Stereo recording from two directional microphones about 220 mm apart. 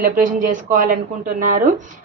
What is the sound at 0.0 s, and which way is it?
A woman's voice, 35° right (ahead or behind).